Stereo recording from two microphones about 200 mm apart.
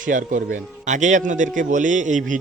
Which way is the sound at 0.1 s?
40° right (ahead or behind).